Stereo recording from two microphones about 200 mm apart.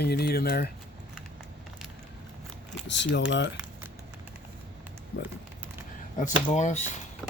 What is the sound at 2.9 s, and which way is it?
Speech, 60° left (ahead or behind).